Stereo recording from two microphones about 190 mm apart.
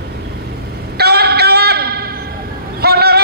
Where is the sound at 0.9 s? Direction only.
55° right (ahead or behind).